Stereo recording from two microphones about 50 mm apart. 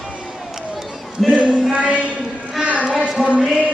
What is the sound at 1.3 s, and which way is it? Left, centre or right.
Speech, centre.